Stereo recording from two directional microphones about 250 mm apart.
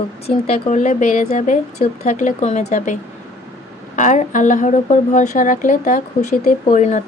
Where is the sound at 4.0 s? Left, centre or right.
Left.